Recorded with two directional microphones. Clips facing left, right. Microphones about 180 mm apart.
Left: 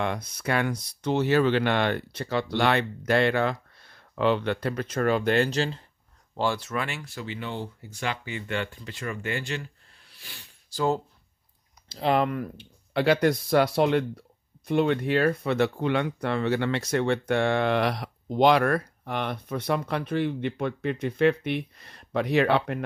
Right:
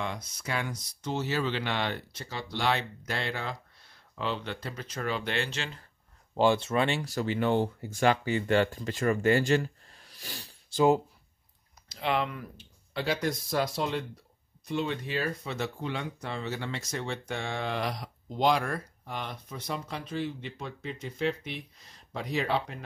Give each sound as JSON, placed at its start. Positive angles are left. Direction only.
{"t": 0.0, "sound": "speech", "side_deg": 60}
{"t": 6.3, "sound": "speech", "side_deg": -20}
{"t": 10.7, "sound": "speech", "side_deg": -20}
{"t": 11.9, "sound": "speech", "side_deg": 40}